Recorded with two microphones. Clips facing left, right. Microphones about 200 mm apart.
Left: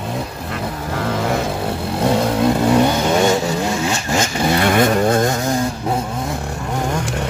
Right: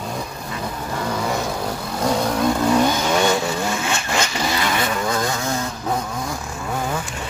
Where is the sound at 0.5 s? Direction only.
75° left (ahead or behind).